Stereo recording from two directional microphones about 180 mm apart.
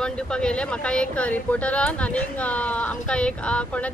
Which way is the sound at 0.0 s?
5° left (ahead or behind).